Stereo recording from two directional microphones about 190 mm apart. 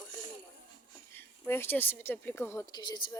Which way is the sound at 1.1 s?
10° left (ahead or behind).